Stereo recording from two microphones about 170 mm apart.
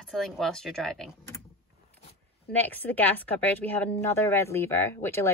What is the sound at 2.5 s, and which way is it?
A woman's voice, 10° left (ahead or behind).